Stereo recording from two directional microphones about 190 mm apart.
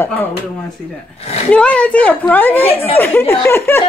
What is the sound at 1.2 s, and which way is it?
Speech, 35° left (ahead or behind).